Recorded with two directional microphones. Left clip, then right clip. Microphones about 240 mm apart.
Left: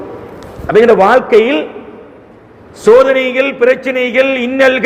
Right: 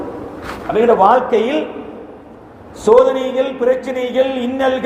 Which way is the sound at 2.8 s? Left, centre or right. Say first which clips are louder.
Left 4 dB; left.